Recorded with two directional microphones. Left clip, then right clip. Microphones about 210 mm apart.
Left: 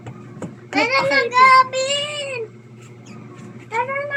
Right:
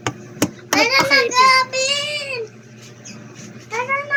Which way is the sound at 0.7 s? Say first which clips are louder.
Right 2 dB; 20° right (ahead or behind).